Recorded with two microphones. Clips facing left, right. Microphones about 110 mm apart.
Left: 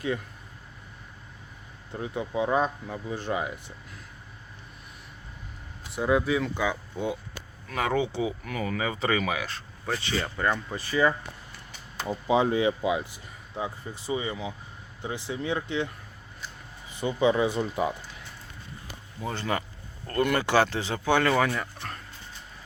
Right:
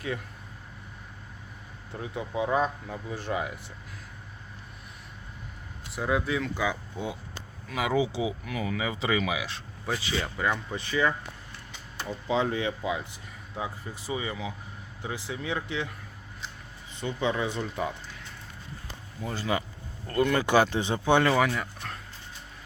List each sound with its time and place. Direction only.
1.9 s speech: centre (ahead or behind)
5.9 s speech: centre (ahead or behind)
6.6 s speech: 10° right (ahead or behind)
12.0 s speech: 15° left (ahead or behind)
13.6 s speech: 5° right (ahead or behind)
17.0 s speech: 5° left (ahead or behind)
19.2 s speech: 5° right (ahead or behind); by 21.3 s 20° right (ahead or behind)
21.3 s speech: 5° right (ahead or behind)